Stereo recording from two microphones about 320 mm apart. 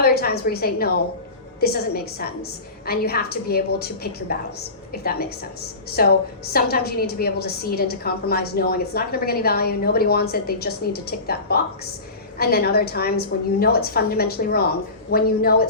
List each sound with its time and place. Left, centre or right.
0.0 s a woman's voice: left
6.0 s a woman's voice: left